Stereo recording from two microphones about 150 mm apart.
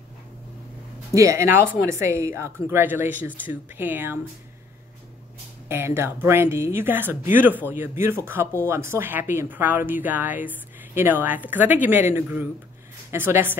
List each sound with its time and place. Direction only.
1.1 s a woman's voice: 20° right (ahead or behind)
5.7 s a woman's voice: 15° right (ahead or behind)